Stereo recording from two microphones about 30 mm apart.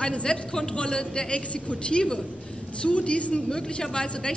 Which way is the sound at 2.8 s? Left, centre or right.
Left.